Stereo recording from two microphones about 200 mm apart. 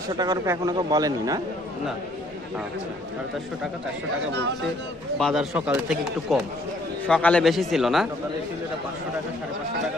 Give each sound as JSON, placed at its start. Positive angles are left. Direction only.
{"t": 0.1, "sound": "a man's voice", "side_deg": -20}
{"t": 5.2, "sound": "a man's voice", "side_deg": 0}